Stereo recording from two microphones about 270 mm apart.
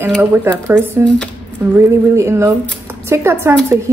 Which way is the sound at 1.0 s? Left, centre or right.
Centre.